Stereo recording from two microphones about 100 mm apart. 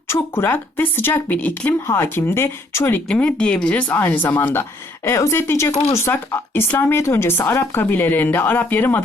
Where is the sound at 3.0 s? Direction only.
10° left (ahead or behind).